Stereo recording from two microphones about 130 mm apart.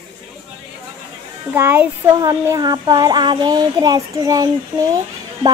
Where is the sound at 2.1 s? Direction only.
30° right (ahead or behind).